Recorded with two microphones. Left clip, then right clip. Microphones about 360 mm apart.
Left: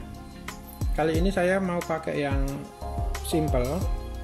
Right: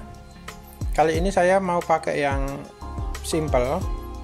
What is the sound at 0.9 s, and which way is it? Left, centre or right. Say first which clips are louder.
Speech: right 6 dB; centre.